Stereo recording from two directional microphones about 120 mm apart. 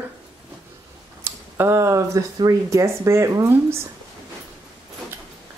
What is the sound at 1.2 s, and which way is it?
Speech, 20° right (ahead or behind).